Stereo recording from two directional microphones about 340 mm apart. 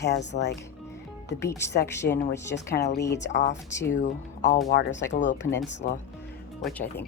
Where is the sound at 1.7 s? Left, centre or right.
Left.